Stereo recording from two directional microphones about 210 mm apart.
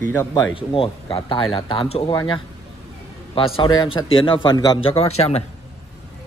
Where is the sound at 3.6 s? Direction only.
20° left (ahead or behind).